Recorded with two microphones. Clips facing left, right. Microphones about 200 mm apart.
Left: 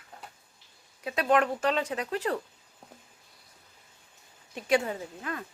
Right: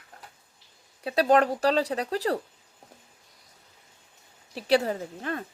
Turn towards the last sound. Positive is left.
turn(degrees=-35)  # may be behind; listen again after turning